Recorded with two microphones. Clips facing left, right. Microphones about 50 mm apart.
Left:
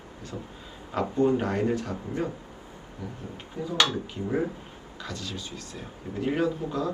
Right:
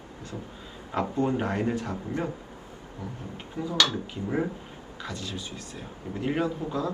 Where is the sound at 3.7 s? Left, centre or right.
Left.